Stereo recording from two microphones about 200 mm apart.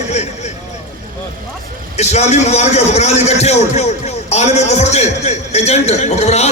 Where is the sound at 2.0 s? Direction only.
35° left (ahead or behind).